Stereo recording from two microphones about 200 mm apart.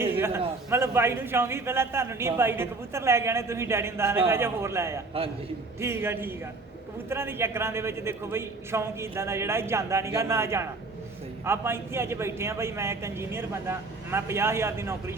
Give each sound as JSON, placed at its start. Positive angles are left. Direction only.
{"t": 0.0, "sound": "a man's voice", "side_deg": -10}